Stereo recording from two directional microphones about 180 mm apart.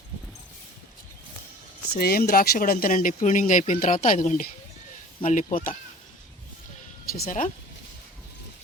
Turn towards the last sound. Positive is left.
turn(degrees=45)  # may be behind; listen again after turning